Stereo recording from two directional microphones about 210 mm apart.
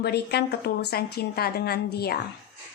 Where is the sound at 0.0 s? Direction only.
50° left (ahead or behind).